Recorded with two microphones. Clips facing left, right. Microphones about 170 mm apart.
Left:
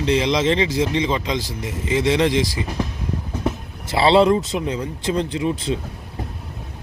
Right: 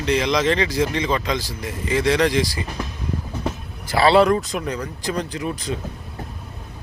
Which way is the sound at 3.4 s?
25° left (ahead or behind).